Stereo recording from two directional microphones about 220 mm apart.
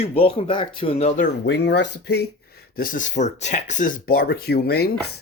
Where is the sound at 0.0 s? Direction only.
25° left (ahead or behind).